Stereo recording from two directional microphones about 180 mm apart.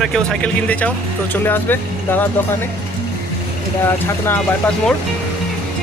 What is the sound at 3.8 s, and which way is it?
Speech, 10° left (ahead or behind).